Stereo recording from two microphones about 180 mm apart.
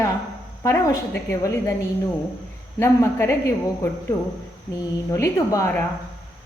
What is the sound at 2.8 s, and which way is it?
Speech, 15° left (ahead or behind).